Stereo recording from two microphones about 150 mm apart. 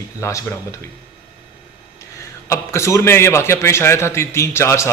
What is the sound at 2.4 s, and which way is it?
A man's voice, 20° left (ahead or behind).